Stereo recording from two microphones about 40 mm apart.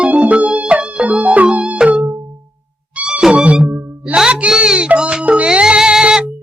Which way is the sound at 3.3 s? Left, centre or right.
Right.